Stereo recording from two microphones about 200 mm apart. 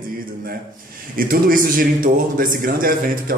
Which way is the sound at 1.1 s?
45° right (ahead or behind).